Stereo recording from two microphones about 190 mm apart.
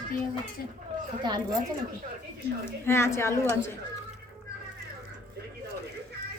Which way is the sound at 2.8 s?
15° left (ahead or behind).